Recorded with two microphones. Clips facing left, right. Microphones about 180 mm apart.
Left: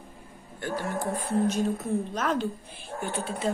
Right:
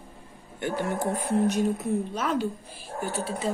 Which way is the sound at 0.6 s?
20° right (ahead or behind).